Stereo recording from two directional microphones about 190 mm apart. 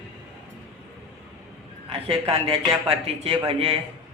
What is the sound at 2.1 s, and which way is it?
A man's voice, 30° right (ahead or behind).